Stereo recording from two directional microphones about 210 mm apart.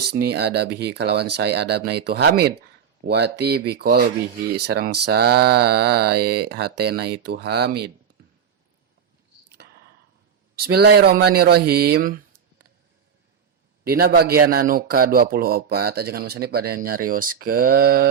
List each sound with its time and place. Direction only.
0.1 s speech: 50° right (ahead or behind)
9.6 s a sound: 50° right (ahead or behind)
10.5 s speech: 50° right (ahead or behind)
13.8 s speech: 45° right (ahead or behind)